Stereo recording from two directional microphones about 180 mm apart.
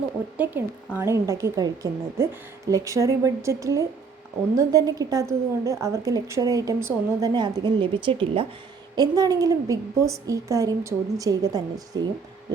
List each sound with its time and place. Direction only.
0.3 s a woman's voice: 10° right (ahead or behind)